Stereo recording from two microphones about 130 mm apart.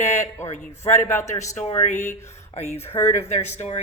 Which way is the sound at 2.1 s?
20° left (ahead or behind).